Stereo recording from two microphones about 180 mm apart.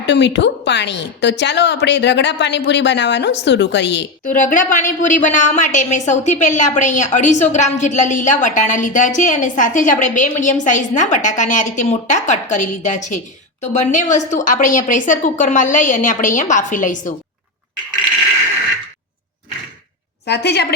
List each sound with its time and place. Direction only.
0.0 s a woman's voice: 75° left (ahead or behind)
4.3 s a woman's voice: 45° left (ahead or behind)
20.2 s a woman's voice: 65° left (ahead or behind)